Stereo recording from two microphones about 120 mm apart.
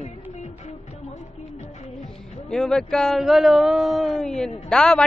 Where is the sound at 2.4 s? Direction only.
5° left (ahead or behind).